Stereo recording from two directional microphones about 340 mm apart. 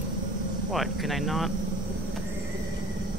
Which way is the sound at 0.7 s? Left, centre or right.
Centre.